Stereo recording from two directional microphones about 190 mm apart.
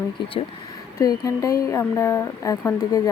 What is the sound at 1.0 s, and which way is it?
Speech, 15° left (ahead or behind).